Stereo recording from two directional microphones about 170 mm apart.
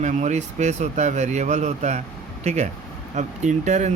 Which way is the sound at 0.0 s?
45° right (ahead or behind).